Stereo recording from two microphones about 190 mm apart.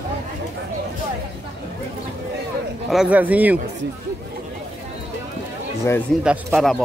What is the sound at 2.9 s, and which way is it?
Speech, 5° right (ahead or behind).